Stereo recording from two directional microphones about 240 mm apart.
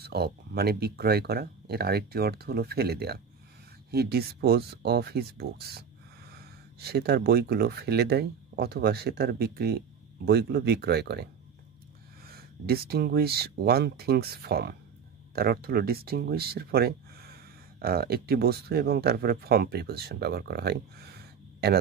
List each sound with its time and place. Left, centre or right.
0.0 s speech: right
12.3 s speech: right